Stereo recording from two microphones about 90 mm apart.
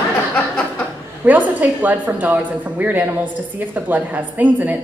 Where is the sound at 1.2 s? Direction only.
20° right (ahead or behind).